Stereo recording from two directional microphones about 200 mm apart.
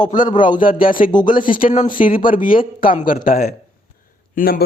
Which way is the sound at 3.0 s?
45° left (ahead or behind).